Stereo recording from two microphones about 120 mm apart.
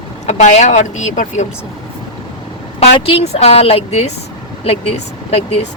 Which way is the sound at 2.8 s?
60° left (ahead or behind).